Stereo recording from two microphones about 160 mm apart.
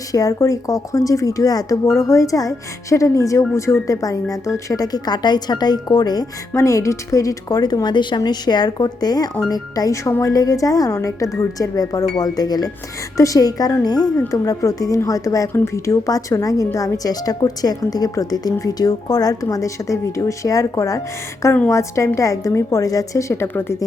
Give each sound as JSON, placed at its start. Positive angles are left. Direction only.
{"t": 0.1, "sound": "a woman's voice", "side_deg": 20}